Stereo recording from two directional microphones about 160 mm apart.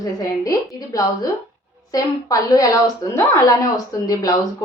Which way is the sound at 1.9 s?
20° left (ahead or behind).